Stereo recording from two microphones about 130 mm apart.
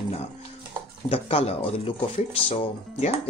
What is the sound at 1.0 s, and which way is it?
Speech, 45° left (ahead or behind).